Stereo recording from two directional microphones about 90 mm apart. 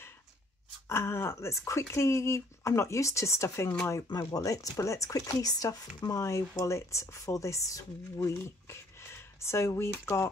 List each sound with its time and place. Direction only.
0.8 s speech: 30° left (ahead or behind)